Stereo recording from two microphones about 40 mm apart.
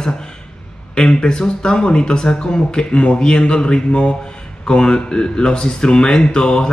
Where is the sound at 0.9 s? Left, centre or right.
Left.